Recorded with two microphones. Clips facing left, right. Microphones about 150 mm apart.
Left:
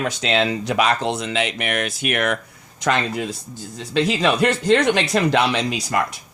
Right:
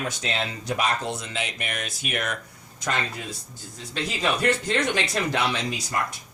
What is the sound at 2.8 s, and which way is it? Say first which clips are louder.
Speech: left 8 dB; 80° left.